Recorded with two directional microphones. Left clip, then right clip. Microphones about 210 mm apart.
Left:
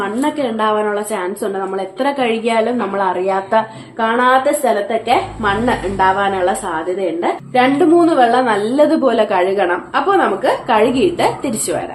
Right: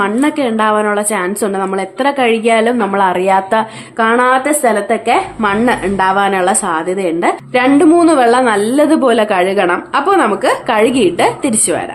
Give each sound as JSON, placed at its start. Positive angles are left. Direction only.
{"t": 0.0, "sound": "a woman's voice", "side_deg": -35}
{"t": 4.0, "sound": "a woman's voice", "side_deg": -45}